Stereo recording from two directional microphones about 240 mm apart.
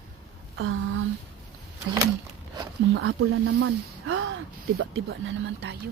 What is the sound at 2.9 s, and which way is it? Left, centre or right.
Speech, right.